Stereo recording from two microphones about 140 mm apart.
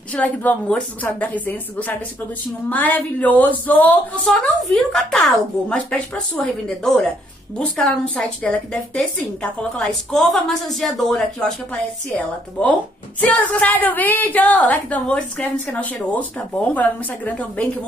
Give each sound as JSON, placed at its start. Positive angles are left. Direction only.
{"t": 0.1, "sound": "a woman's voice", "side_deg": 10}